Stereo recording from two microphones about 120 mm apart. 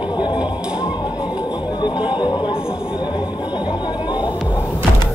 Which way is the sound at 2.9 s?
40° left (ahead or behind).